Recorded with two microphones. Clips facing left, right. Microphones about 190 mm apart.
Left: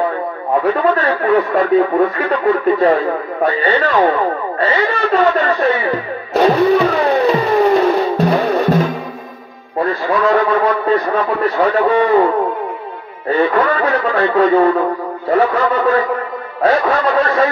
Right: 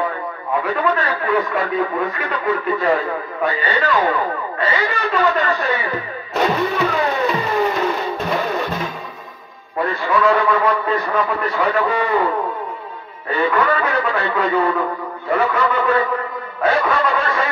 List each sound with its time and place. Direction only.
0.6 s a man's voice: 35° left (ahead or behind)
6.3 s music: 35° left (ahead or behind)
9.8 s a man's voice: 30° left (ahead or behind)
13.3 s a man's voice: 35° left (ahead or behind)